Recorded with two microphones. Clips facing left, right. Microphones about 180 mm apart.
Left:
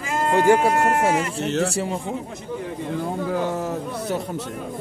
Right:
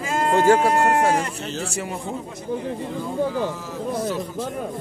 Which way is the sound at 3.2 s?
60° left (ahead or behind).